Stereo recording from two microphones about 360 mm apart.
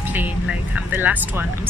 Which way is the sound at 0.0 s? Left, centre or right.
Centre.